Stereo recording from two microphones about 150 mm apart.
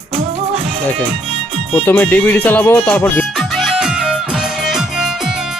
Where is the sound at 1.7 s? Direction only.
10° left (ahead or behind).